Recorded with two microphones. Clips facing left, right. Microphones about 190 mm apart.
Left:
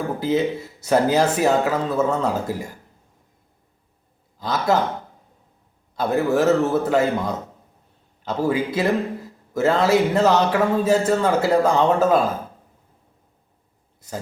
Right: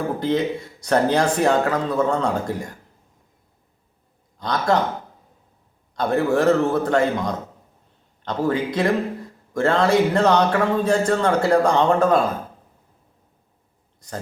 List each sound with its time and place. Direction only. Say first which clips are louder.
0.2 s speech: left 3 dB; 5° left (ahead or behind)
4.4 s speech: even; 5° left (ahead or behind)
6.0 s speech: even; 5° left (ahead or behind)